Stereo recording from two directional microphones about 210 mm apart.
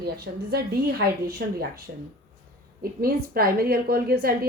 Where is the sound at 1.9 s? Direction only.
45° right (ahead or behind).